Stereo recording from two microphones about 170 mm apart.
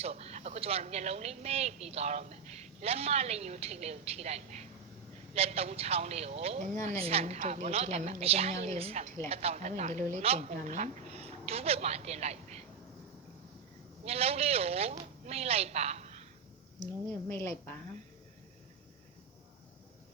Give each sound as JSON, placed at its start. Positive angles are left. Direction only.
{"t": 0.0, "sound": "speech", "side_deg": -35}
{"t": 14.0, "sound": "a woman's voice", "side_deg": -35}